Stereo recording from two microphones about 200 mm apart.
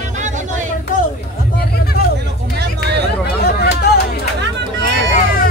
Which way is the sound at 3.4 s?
55° left (ahead or behind).